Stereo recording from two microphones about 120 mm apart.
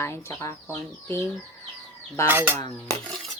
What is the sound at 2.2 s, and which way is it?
Speech, 15° right (ahead or behind).